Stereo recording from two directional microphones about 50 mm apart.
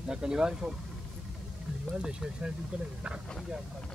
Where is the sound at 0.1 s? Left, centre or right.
Centre.